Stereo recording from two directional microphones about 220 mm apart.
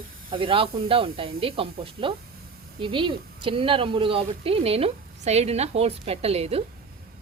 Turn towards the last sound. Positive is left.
turn(degrees=-25)  # may be behind; listen again after turning